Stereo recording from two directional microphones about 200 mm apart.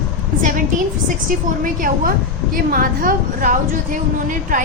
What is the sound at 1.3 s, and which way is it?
A woman's voice, 45° right (ahead or behind).